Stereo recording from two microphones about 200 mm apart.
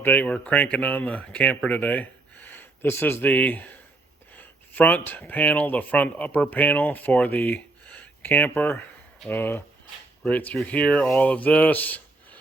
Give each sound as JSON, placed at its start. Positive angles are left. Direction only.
{"t": 0.0, "sound": "speech", "side_deg": 10}